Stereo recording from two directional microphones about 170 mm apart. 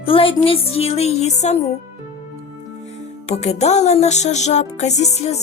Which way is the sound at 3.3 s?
40° left (ahead or behind).